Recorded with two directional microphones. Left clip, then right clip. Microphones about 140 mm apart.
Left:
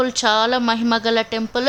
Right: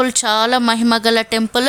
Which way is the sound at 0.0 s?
40° right (ahead or behind).